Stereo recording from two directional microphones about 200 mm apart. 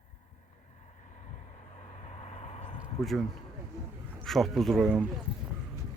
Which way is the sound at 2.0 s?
35° left (ahead or behind).